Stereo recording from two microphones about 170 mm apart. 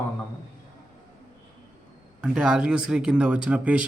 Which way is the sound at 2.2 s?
Centre (ahead or behind).